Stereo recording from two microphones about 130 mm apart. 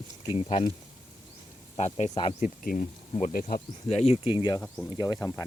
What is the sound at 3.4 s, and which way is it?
Speech, 55° left (ahead or behind).